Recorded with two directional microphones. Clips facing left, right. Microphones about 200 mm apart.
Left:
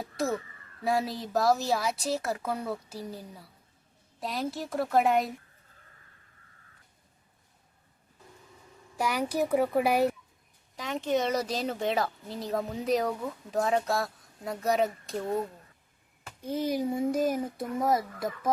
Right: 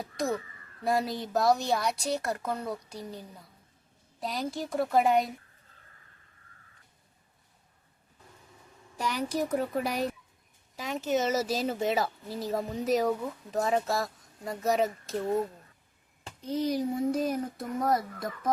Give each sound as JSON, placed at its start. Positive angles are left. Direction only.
{"t": 0.0, "sound": "speech", "side_deg": 0}
{"t": 9.0, "sound": "speech", "side_deg": 10}
{"t": 10.8, "sound": "speech", "side_deg": -5}
{"t": 16.5, "sound": "speech", "side_deg": 50}